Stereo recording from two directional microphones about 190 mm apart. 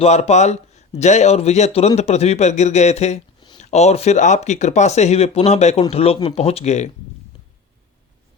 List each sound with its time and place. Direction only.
0.0 s speech: 35° left (ahead or behind)